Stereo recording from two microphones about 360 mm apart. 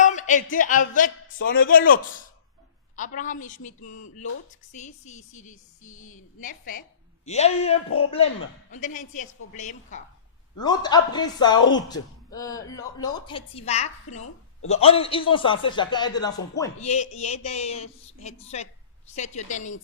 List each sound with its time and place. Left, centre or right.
0.0 s a man's voice: left